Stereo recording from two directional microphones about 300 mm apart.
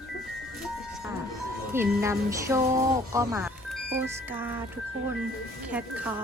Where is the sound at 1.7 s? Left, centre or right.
Centre.